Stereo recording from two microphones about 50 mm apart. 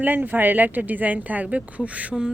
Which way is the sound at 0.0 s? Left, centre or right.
Right.